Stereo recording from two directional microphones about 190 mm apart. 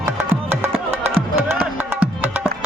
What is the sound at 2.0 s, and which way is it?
Music, 5° right (ahead or behind).